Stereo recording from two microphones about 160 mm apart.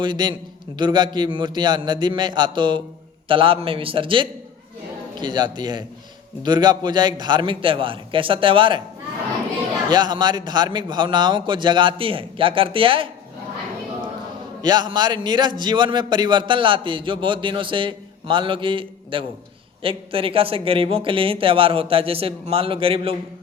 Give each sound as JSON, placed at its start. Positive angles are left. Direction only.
{"t": 0.0, "sound": "a man's voice", "side_deg": -30}
{"t": 9.9, "sound": "speech", "side_deg": -25}
{"t": 14.6, "sound": "a man's voice", "side_deg": -25}